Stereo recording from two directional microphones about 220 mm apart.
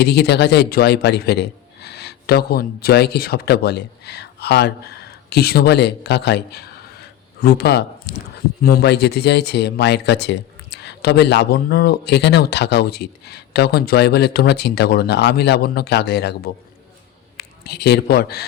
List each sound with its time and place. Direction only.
0.0 s a man's voice: 50° left (ahead or behind)